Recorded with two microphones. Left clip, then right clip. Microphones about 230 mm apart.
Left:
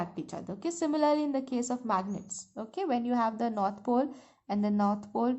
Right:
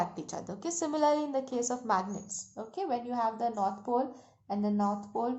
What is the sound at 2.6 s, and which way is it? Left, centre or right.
A woman's voice, left.